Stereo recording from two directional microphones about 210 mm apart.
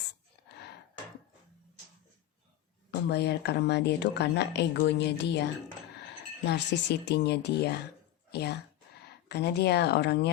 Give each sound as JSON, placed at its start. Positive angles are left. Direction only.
{"t": 2.9, "sound": "speech", "side_deg": 50}